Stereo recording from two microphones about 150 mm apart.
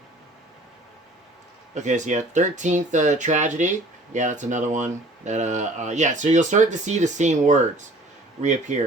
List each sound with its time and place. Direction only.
1.7 s speech: 55° right (ahead or behind)